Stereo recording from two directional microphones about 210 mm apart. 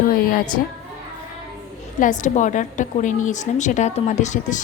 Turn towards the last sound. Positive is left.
turn(degrees=35)  # may be behind; listen again after turning